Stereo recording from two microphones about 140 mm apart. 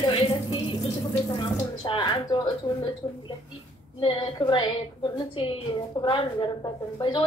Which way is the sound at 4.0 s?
40° left (ahead or behind).